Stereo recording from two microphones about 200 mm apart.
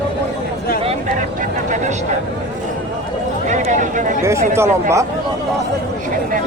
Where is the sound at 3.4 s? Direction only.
40° right (ahead or behind).